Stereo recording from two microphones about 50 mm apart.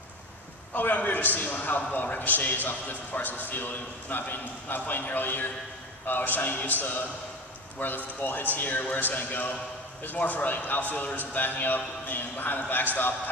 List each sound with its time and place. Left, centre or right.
0.7 s a man's voice: left